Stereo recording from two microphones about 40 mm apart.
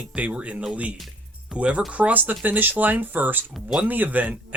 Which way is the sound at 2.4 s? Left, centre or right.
Right.